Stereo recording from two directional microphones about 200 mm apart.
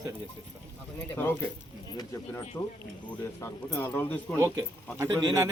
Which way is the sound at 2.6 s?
15° left (ahead or behind).